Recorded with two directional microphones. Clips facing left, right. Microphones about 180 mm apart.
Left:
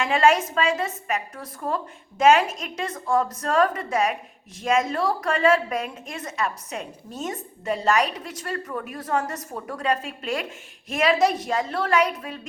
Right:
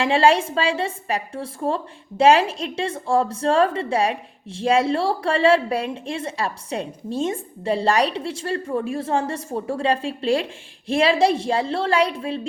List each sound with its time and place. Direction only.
0.0 s a woman's voice: 30° right (ahead or behind)